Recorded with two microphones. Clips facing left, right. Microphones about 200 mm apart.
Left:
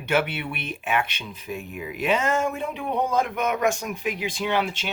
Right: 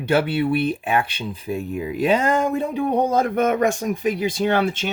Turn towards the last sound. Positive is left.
turn(degrees=-45)  # may be behind; listen again after turning